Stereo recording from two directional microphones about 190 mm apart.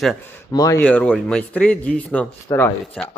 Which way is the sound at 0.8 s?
5° left (ahead or behind).